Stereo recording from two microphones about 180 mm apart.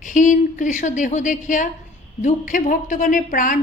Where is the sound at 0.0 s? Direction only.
45° left (ahead or behind).